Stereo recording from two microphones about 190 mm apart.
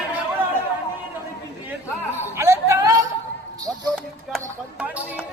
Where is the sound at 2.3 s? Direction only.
15° right (ahead or behind).